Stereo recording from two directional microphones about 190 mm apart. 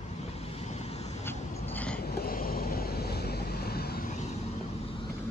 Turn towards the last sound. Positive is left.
turn(degrees=35)  # may be behind; listen again after turning